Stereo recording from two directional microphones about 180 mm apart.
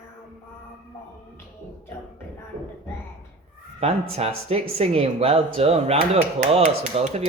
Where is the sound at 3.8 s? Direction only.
35° right (ahead or behind).